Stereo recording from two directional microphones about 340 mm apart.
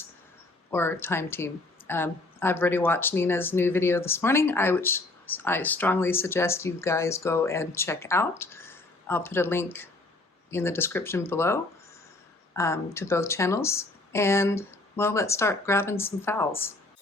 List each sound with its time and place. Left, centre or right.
0.7 s speech: centre